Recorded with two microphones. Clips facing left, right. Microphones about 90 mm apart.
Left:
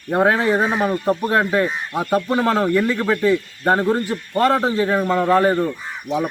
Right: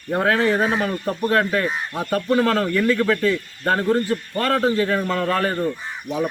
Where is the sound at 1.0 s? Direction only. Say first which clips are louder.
Left 4 dB; 30° left (ahead or behind).